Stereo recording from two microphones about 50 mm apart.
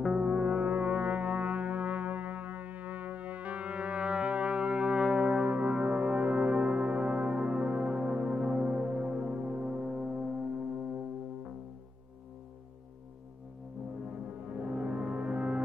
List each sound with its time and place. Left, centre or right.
0.1 s music: centre
14.0 s music: right